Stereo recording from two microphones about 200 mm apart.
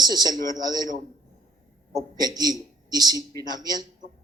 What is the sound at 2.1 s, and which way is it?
A man's voice, 20° right (ahead or behind).